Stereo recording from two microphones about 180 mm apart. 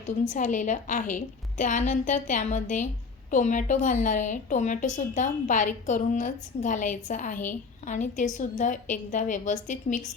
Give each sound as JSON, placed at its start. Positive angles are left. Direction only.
{"t": 0.0, "sound": "a woman's voice", "side_deg": 45}